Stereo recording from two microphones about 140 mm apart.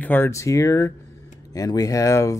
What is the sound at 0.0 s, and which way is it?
Speech, 15° left (ahead or behind).